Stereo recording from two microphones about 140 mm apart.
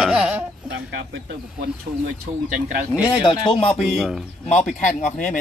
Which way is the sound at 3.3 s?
40° left (ahead or behind).